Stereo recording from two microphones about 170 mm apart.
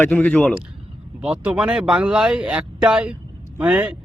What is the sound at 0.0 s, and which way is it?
Speech, 10° left (ahead or behind).